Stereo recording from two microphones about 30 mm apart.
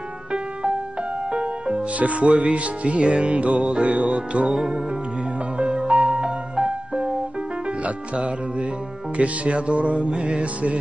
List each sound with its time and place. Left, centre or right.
1.3 s music: right
2.0 s music: right
2.2 s music: right
9.1 s music: right